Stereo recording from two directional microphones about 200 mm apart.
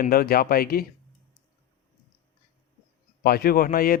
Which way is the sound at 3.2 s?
50° left (ahead or behind).